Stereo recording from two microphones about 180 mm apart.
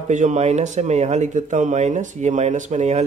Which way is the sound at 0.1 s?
40° right (ahead or behind).